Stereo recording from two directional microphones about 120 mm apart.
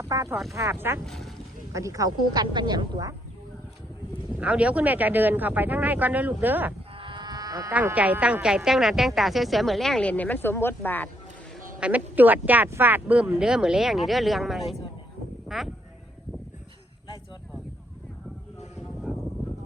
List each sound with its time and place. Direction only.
0.0 s speech: 25° right (ahead or behind)
1.0 s a woman's voice: 5° left (ahead or behind)
1.7 s speech: 25° right (ahead or behind)
4.4 s speech: 10° right (ahead or behind)
6.9 s sheep: 45° right (ahead or behind)
7.7 s a woman's voice: 15° right (ahead or behind); by 11.1 s 15° left (ahead or behind)
11.8 s speech: 10° right (ahead or behind)
19.1 s a sound: 5° right (ahead or behind)